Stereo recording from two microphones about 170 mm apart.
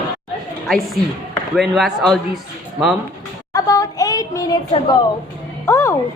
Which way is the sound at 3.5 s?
20° left (ahead or behind).